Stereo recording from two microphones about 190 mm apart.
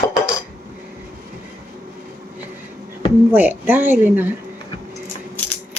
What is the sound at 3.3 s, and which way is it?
Speech, 10° right (ahead or behind).